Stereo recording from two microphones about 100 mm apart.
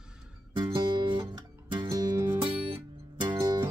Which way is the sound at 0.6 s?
50° right (ahead or behind).